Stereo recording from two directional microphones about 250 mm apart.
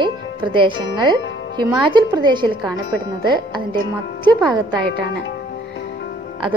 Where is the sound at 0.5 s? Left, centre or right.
Centre.